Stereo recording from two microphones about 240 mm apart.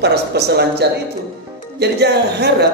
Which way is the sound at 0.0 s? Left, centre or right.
Right.